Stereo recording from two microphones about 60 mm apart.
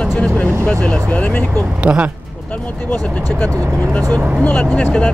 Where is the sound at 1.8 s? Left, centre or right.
Right.